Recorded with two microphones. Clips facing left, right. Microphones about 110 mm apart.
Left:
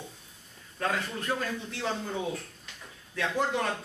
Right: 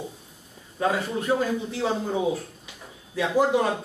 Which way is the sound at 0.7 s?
10° right (ahead or behind).